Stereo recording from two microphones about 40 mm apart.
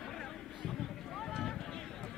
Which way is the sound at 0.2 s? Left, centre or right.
Centre.